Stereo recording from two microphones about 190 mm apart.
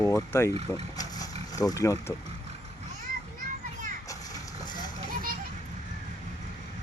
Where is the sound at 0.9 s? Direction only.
20° left (ahead or behind).